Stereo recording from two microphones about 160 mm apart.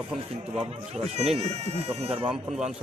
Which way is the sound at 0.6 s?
40° right (ahead or behind).